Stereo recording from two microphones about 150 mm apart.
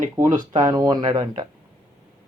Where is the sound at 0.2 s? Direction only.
25° right (ahead or behind).